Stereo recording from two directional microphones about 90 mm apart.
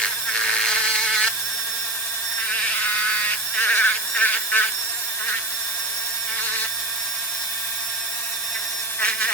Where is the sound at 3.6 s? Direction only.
20° left (ahead or behind).